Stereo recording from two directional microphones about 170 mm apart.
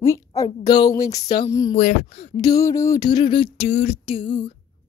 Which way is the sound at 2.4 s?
20° left (ahead or behind).